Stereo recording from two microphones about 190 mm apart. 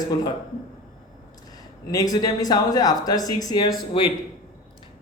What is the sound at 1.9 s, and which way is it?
Speech, 20° left (ahead or behind).